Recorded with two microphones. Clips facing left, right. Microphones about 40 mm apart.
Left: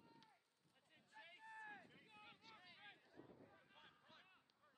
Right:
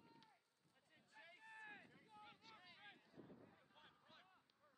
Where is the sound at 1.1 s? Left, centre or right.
Left.